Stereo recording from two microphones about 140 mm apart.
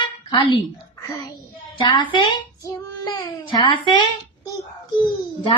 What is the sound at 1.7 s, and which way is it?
Speech, 35° left (ahead or behind).